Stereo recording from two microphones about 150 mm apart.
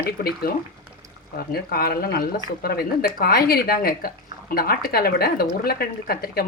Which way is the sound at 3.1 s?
80° left.